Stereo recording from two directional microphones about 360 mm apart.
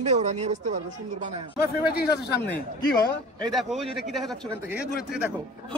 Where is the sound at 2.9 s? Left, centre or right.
Centre.